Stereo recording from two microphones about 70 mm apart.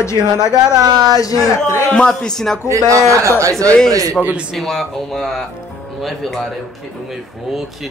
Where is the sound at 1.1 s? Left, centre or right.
Left.